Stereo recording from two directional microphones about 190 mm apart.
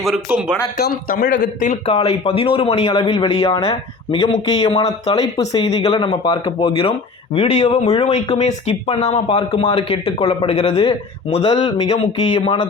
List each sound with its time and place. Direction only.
0.0 s speech: 5° right (ahead or behind)
0.8 s a man's voice: 55° left (ahead or behind)
1.9 s speech: 30° left (ahead or behind)